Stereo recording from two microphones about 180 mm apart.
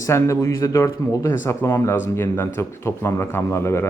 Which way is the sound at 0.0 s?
15° left (ahead or behind).